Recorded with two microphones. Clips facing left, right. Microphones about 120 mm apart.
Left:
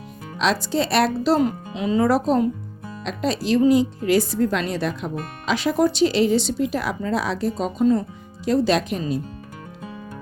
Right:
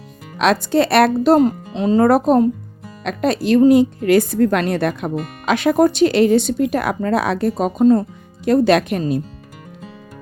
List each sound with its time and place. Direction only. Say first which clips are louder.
0.3 s speech: right 6 dB; 55° right (ahead or behind)
1.5 s speech: right 6 dB; 35° right (ahead or behind)
2.0 s speech: right 5 dB; 55° right (ahead or behind)